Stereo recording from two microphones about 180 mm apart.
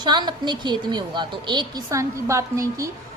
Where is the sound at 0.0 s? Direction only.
25° right (ahead or behind).